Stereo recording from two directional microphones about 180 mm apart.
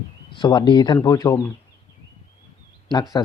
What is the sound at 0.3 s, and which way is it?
Speech, 25° left (ahead or behind).